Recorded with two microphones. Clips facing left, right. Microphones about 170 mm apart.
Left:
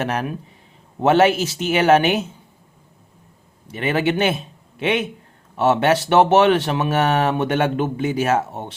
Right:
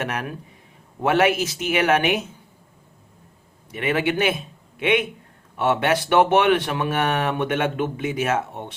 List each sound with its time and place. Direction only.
0.0 s speech: 30° left (ahead or behind)
3.7 s a man's voice: 30° left (ahead or behind)